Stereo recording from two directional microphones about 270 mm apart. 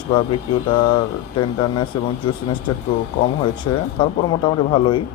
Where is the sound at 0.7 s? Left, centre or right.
Centre.